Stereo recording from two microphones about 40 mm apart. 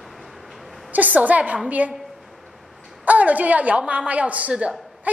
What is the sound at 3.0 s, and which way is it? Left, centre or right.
A woman's voice, right.